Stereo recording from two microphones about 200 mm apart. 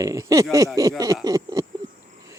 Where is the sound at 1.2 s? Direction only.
15° right (ahead or behind).